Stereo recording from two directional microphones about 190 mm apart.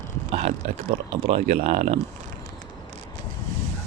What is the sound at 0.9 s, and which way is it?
Speech, 35° right (ahead or behind).